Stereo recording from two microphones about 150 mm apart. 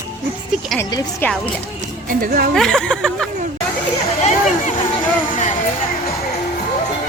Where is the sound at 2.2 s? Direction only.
70° right (ahead or behind).